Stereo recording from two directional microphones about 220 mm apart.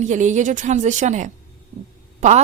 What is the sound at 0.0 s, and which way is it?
A woman's voice, 35° right (ahead or behind).